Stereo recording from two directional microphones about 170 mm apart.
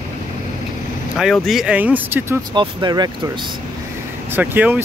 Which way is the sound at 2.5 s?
25° right (ahead or behind).